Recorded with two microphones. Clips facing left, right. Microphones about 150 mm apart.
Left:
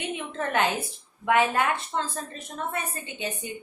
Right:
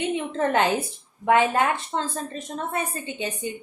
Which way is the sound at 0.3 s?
30° right (ahead or behind).